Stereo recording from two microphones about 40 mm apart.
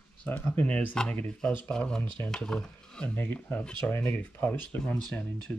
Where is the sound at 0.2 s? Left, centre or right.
Left.